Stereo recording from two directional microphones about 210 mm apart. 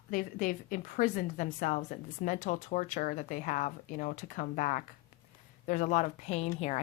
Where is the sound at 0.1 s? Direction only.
40° left (ahead or behind).